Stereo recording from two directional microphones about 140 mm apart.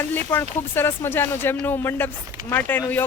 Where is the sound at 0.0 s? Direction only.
15° left (ahead or behind).